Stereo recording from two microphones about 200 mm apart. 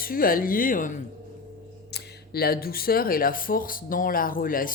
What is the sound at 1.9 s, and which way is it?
Speech, 55° left (ahead or behind).